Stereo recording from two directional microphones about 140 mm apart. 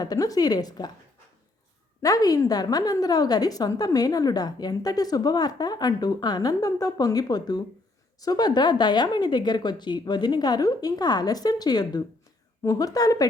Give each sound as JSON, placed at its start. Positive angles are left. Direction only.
{"t": 0.0, "sound": "a woman's voice", "side_deg": 25}
{"t": 2.0, "sound": "a woman's voice", "side_deg": 25}